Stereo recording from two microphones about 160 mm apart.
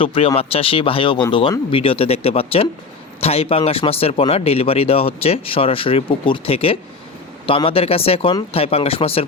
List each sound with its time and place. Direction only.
0.0 s speech: 35° left (ahead or behind)